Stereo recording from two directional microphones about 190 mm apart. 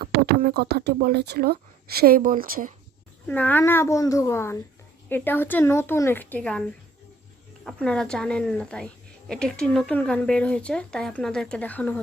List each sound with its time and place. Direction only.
0.0 s speech: 55° right (ahead or behind)
3.2 s speech: 10° left (ahead or behind)